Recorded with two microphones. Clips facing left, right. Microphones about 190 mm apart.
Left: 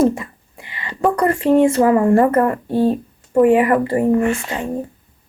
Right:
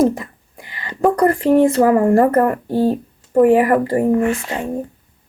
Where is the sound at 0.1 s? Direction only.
40° right (ahead or behind).